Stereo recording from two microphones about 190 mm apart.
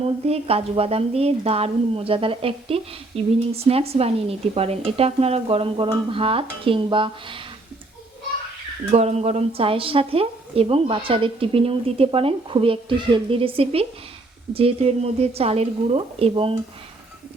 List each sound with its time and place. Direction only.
0.3 s a woman's voice: 30° right (ahead or behind)
8.9 s a woman's voice: 35° right (ahead or behind)